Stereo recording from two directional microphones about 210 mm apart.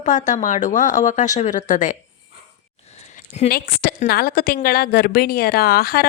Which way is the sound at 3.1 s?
35° left (ahead or behind).